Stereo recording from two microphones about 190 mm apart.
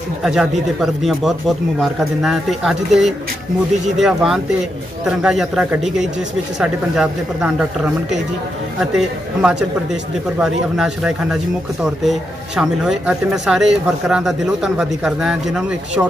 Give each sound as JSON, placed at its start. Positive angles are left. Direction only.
{"t": 0.2, "sound": "speech", "side_deg": -5}
{"t": 8.9, "sound": "speech", "side_deg": -5}